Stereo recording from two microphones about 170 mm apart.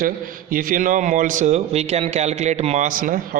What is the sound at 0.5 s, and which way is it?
Speech, 55° right (ahead or behind).